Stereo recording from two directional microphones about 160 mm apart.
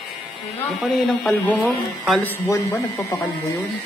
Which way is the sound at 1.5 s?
Centre (ahead or behind).